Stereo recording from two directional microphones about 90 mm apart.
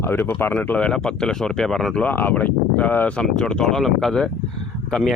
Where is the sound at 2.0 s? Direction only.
20° left (ahead or behind).